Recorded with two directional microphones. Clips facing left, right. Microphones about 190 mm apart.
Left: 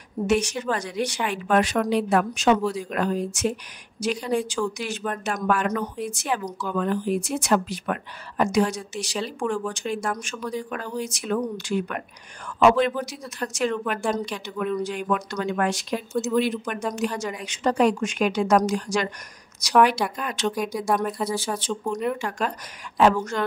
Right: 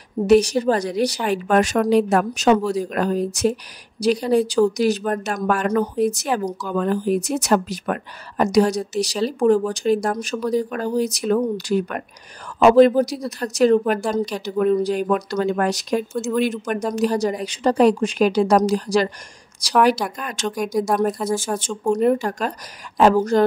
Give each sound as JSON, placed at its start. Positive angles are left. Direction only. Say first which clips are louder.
{"t": 0.3, "sound": "speech", "louder": "right 9 dB", "side_deg": -35}